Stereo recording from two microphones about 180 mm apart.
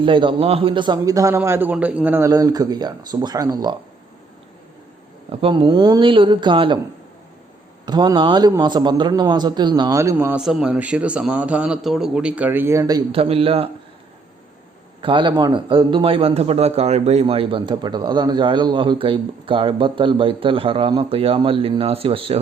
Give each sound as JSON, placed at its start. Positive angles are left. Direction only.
{"t": 0.0, "sound": "a man's voice", "side_deg": -30}
{"t": 5.3, "sound": "a man's voice", "side_deg": -30}
{"t": 7.9, "sound": "a man's voice", "side_deg": -25}
{"t": 13.1, "sound": "speech", "side_deg": -30}
{"t": 15.0, "sound": "a man's voice", "side_deg": -25}